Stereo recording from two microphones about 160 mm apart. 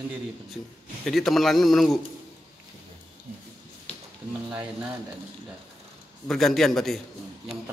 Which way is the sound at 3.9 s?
40° left (ahead or behind).